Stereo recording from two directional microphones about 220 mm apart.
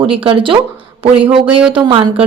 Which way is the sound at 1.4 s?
5° right (ahead or behind).